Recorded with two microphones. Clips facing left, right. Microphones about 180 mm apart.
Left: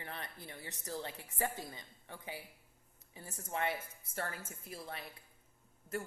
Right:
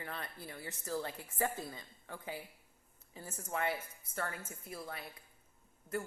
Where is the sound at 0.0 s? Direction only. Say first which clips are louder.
Right 2 dB; 20° left (ahead or behind).